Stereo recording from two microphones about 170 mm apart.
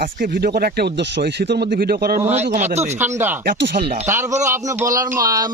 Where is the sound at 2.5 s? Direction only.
40° right (ahead or behind).